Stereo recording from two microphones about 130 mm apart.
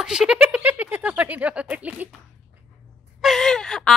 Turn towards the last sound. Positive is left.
turn(degrees=5)  # may be behind; listen again after turning